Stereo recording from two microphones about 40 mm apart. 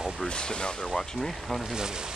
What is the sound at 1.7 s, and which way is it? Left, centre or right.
Speech, centre.